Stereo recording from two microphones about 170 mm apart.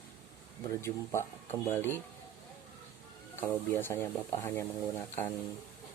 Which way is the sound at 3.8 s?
15° left (ahead or behind).